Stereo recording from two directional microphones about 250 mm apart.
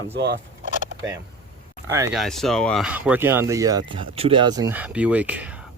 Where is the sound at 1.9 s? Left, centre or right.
Centre.